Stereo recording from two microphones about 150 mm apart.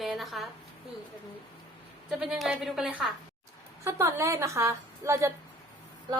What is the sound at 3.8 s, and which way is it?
A woman's voice, 20° right (ahead or behind).